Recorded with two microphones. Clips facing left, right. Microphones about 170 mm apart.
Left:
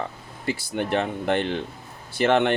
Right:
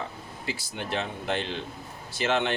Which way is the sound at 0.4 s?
55° left (ahead or behind).